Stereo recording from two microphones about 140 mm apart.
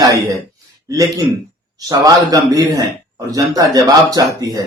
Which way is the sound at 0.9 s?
25° right (ahead or behind).